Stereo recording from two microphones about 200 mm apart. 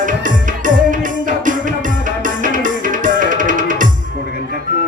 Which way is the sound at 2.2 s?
40° right (ahead or behind).